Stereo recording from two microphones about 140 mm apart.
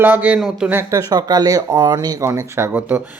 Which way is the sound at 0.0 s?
10° right (ahead or behind).